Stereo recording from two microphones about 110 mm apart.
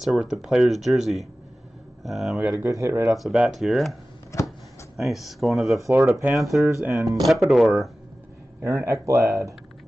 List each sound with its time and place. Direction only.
0.0 s speech: 5° right (ahead or behind)
2.6 s speech: 30° right (ahead or behind)
3.2 s speech: 5° right (ahead or behind)
4.9 s speech: centre (ahead or behind)
5.8 s speech: 25° right (ahead or behind)
6.3 s speech: centre (ahead or behind)
6.8 s speech: 25° right (ahead or behind)
7.2 s speech: centre (ahead or behind)
8.5 s speech: 25° right (ahead or behind)